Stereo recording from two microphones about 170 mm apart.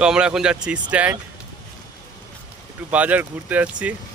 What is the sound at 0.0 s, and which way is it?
Speech, 5° right (ahead or behind).